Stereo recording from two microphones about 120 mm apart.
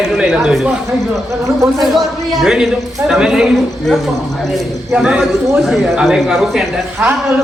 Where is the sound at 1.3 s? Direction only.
25° right (ahead or behind).